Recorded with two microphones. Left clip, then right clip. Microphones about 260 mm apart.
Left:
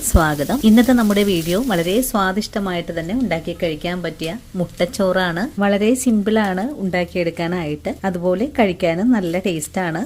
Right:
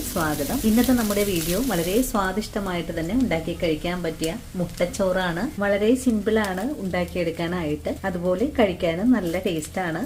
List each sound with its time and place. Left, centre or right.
0.1 s speech: left